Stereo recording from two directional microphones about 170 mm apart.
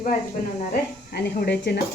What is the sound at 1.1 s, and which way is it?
Speech, 70° left (ahead or behind).